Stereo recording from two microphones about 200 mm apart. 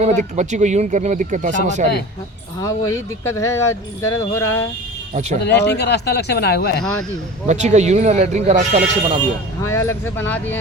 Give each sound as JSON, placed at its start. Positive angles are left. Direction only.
{"t": 0.0, "sound": "speech", "side_deg": -35}
{"t": 2.6, "sound": "speech", "side_deg": 15}
{"t": 5.4, "sound": "speech", "side_deg": 55}
{"t": 7.4, "sound": "speech", "side_deg": -35}
{"t": 9.6, "sound": "speech", "side_deg": 15}